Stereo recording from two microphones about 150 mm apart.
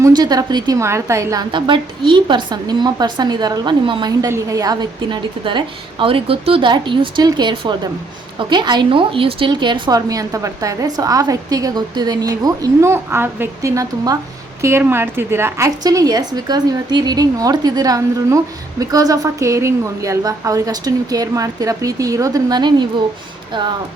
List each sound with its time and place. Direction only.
0.0 s a woman's voice: 25° right (ahead or behind)